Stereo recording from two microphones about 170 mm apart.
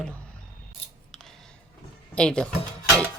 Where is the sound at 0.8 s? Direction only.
35° left (ahead or behind).